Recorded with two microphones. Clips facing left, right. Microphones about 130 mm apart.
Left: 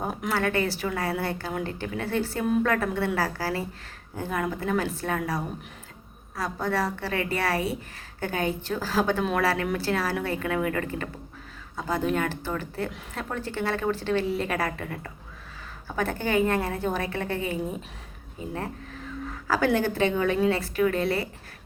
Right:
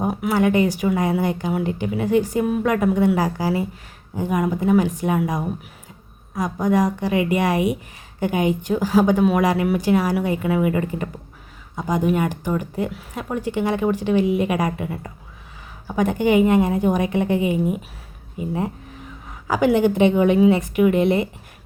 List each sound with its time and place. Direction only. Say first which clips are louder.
0.0 s a woman's voice: right 8 dB; 10° right (ahead or behind)